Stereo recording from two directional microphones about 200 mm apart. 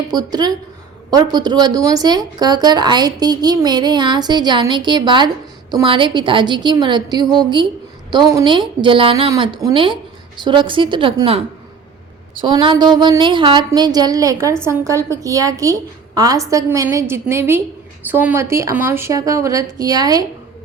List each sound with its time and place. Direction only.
0.1 s a woman's voice: 20° right (ahead or behind)
12.4 s a woman's voice: 25° right (ahead or behind)